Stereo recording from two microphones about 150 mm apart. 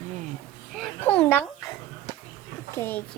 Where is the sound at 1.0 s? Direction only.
10° left (ahead or behind).